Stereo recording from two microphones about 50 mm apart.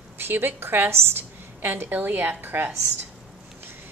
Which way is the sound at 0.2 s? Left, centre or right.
Right.